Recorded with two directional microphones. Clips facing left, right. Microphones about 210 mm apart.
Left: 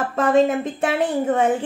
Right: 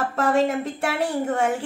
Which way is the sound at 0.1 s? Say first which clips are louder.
Left 5 dB; 15° left (ahead or behind).